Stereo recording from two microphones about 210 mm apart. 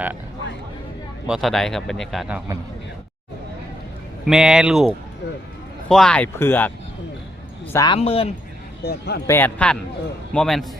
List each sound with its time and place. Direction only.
1.3 s a man's voice: centre (ahead or behind)
4.3 s a man's voice: 5° right (ahead or behind); by 7.9 s 15° left (ahead or behind)
7.9 s speech: 25° left (ahead or behind)
8.8 s a man's voice: 50° left (ahead or behind)
9.2 s a man's voice: 10° left (ahead or behind)